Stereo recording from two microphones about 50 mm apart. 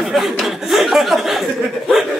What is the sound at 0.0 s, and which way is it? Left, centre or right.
Chuckle, centre.